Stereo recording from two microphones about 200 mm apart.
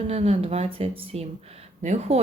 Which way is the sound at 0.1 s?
30° right (ahead or behind).